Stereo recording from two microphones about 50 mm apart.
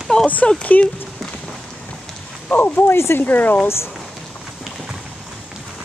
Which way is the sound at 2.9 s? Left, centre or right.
Left.